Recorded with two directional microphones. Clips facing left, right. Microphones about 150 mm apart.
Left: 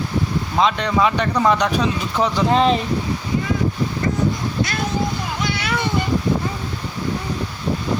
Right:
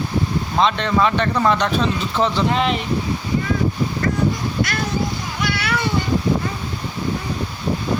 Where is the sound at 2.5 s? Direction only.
35° left (ahead or behind).